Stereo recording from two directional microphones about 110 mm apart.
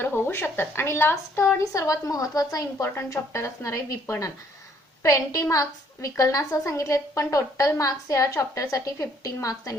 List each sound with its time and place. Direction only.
0.0 s a woman's voice: 20° left (ahead or behind)